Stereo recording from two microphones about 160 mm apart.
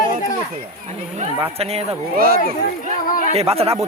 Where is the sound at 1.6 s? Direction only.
40° right (ahead or behind).